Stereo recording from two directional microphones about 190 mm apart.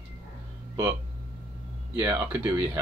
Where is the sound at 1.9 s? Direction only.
10° right (ahead or behind).